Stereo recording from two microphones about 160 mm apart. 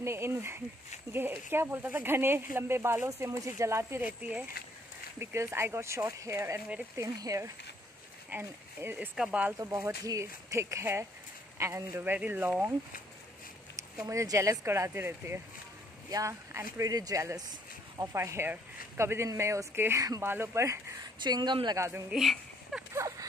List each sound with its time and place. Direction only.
0.0 s speech: 15° right (ahead or behind)
9.6 s speech: 20° right (ahead or behind)
14.0 s speech: 20° right (ahead or behind)
22.1 s speech: centre (ahead or behind)
22.9 s speech: 20° right (ahead or behind)